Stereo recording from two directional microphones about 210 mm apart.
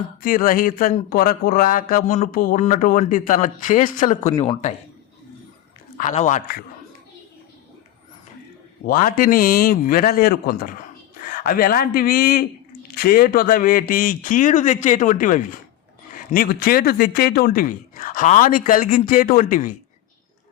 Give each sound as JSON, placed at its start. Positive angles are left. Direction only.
{"t": 0.2, "sound": "speech", "side_deg": 40}
{"t": 6.0, "sound": "speech", "side_deg": 35}
{"t": 8.9, "sound": "a man's voice", "side_deg": 40}